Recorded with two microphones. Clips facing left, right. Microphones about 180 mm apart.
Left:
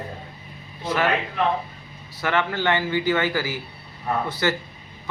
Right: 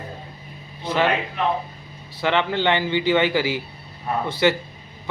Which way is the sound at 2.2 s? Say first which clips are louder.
Right 2 dB; 20° right (ahead or behind).